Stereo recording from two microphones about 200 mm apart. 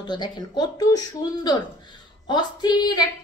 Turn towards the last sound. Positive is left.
turn(degrees=20)  # may be behind; listen again after turning